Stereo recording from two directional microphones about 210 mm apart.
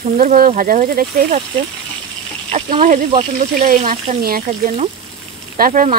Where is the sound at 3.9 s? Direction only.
45° right (ahead or behind).